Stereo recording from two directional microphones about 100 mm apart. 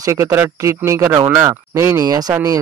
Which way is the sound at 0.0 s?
30° right (ahead or behind).